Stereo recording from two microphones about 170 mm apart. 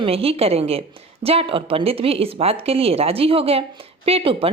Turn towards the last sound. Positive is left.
turn(degrees=-35)  # may be behind; listen again after turning